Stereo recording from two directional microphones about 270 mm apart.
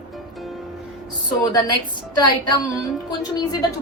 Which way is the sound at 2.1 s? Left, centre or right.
Centre.